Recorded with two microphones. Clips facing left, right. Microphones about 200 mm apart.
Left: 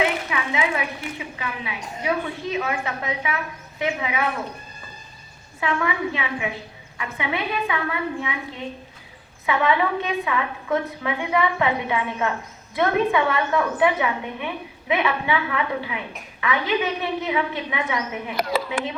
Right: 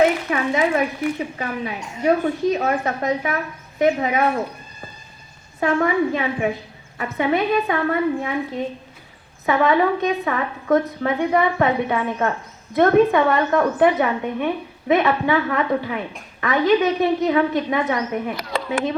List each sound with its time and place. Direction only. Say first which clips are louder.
0.0 s a woman's voice: right 6 dB; 40° right (ahead or behind)
5.5 s a woman's voice: right 6 dB; 45° right (ahead or behind)